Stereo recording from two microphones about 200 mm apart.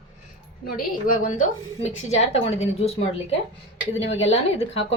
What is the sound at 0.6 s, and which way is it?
A woman's voice, 45° left (ahead or behind).